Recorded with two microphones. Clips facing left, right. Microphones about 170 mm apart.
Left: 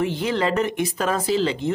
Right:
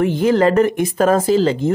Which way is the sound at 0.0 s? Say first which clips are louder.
Right 8 dB; 50° right (ahead or behind).